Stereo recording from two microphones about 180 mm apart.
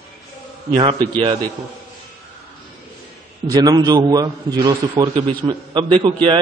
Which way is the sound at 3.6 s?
20° right (ahead or behind).